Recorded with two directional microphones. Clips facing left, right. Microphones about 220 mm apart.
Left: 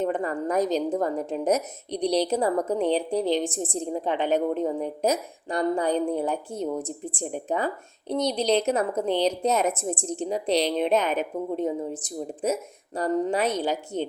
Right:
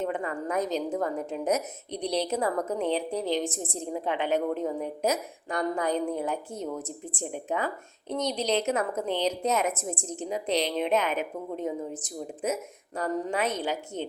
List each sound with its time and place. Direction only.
0.0 s a woman's voice: 35° left (ahead or behind)